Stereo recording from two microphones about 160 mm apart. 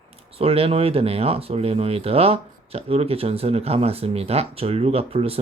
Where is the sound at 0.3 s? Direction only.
35° right (ahead or behind).